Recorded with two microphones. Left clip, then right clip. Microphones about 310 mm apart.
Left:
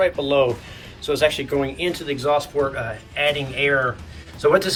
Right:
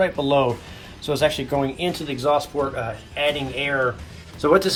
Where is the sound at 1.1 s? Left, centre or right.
Centre.